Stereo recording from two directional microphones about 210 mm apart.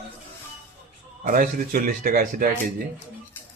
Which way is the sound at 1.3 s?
40° right (ahead or behind).